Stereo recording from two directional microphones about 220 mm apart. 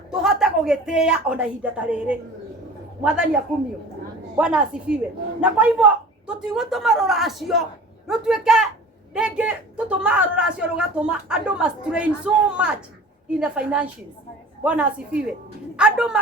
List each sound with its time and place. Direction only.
0.1 s a woman's voice: centre (ahead or behind)
4.4 s a woman's voice: 5° right (ahead or behind)